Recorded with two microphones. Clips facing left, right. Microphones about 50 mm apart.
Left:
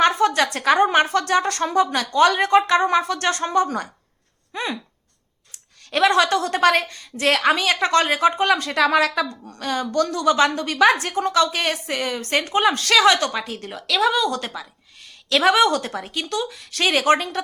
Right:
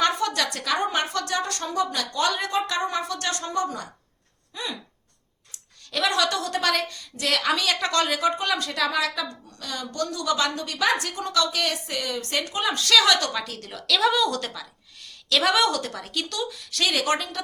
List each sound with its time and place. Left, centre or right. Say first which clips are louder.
0.0 s a woman's voice: left 6 dB; left
5.9 s a woman's voice: left 7 dB; left
11.0 s a woman's voice: left 6 dB; left
13.0 s a woman's voice: left 6 dB; left
14.0 s a woman's voice: left 3 dB; centre; by 17.4 s left